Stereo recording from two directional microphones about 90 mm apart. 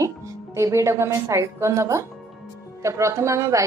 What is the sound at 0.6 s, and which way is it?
A woman's voice, 35° right (ahead or behind).